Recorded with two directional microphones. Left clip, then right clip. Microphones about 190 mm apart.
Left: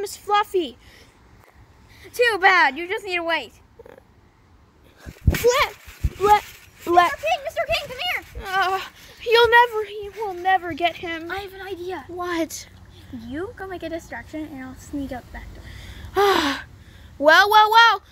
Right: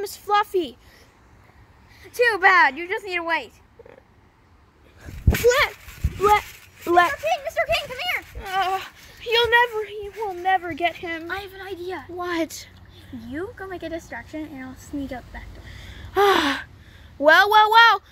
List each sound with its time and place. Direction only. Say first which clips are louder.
0.0 s a woman's voice: even; centre (ahead or behind)
2.0 s a child's voice: even; 20° left (ahead or behind)
6.2 s speech: left 1 dB; centre (ahead or behind)
7.2 s speech: even; 5° right (ahead or behind)
8.4 s speech: left 3 dB; 15° left (ahead or behind)
9.2 s speech: left 4 dB; 35° left (ahead or behind)
9.5 s a woman's voice: left 3 dB; 10° left (ahead or behind)